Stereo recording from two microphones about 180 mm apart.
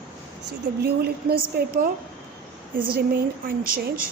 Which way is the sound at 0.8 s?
60° right (ahead or behind).